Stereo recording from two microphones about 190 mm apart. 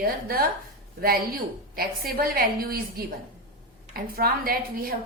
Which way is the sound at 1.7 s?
50° right (ahead or behind).